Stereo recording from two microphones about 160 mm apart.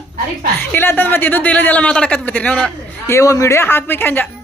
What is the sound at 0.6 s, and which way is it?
A man's voice, 15° left (ahead or behind).